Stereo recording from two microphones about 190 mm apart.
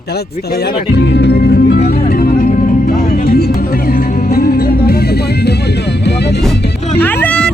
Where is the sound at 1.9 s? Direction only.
55° left (ahead or behind).